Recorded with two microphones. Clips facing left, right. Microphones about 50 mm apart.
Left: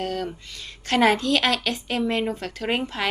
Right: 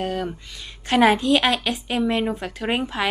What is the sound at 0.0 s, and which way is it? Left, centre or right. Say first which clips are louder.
A woman's voice: right 2 dB; centre.